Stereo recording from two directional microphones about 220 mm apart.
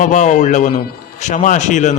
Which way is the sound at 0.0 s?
35° left (ahead or behind).